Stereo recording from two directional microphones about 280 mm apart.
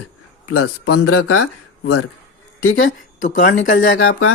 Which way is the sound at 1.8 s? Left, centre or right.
Left.